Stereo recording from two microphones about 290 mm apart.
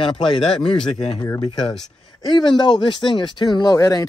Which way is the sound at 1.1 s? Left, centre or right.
Centre.